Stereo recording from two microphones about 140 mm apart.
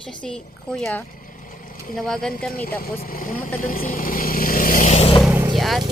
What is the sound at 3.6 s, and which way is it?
Vehicle, 75° left (ahead or behind).